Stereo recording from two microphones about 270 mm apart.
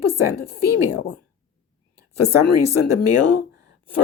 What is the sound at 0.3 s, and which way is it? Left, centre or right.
Speech, left.